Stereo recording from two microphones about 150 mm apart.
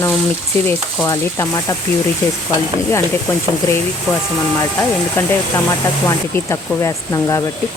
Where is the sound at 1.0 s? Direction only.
20° left (ahead or behind).